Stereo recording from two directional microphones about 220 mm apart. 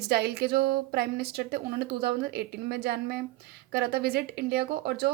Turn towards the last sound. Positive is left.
turn(degrees=-45)  # may be behind; listen again after turning